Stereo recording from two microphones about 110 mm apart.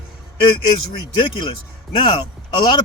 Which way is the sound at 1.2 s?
50° left (ahead or behind).